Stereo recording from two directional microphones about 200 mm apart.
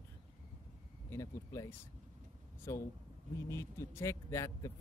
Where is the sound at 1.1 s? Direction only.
15° left (ahead or behind).